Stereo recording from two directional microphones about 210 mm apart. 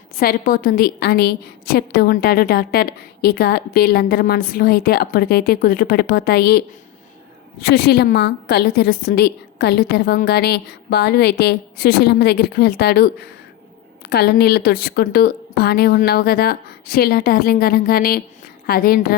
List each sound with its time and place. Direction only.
0.2 s a woman's voice: 45° left (ahead or behind)
7.6 s a woman's voice: 50° left (ahead or behind)